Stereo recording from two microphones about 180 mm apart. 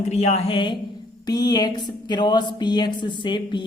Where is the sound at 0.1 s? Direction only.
35° left (ahead or behind).